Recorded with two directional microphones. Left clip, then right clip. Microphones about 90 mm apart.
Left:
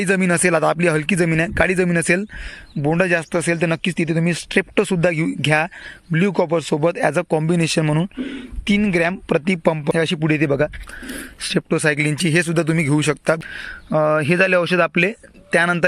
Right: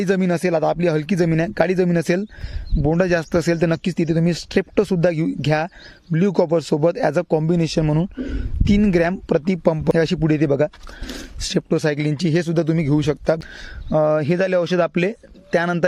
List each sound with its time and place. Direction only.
0.2 s speech: 15° right (ahead or behind)
0.9 s speech: 35° right (ahead or behind)
3.0 s speech: 70° right (ahead or behind); by 5.7 s 35° right (ahead or behind)
6.3 s speech: 55° right (ahead or behind)
7.3 s speech: 25° right (ahead or behind)
8.2 s speech: 50° right (ahead or behind)
9.3 s speech: 30° right (ahead or behind)
9.8 s a man's voice: 75° right (ahead or behind)
10.2 s speech: 40° right (ahead or behind)
10.6 s speech: 25° right (ahead or behind)
15.4 s speech: 40° right (ahead or behind)